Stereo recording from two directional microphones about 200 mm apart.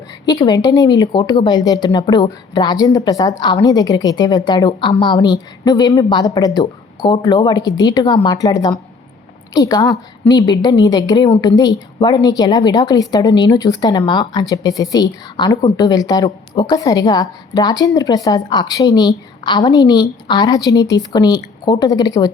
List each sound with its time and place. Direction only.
0.3 s a woman's voice: 20° left (ahead or behind)